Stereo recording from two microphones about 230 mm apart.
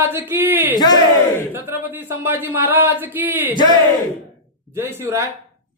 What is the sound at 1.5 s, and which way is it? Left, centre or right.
Speech, centre.